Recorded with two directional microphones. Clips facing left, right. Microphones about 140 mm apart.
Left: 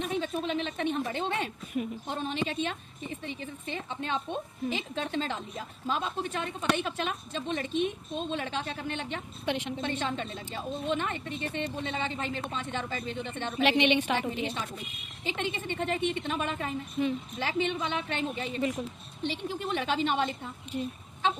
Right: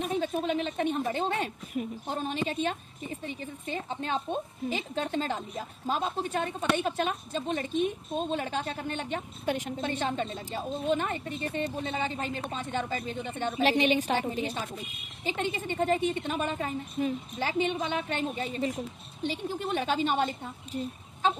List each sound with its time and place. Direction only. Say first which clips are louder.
0.2 s a woman's voice: right 2 dB; 45° right (ahead or behind)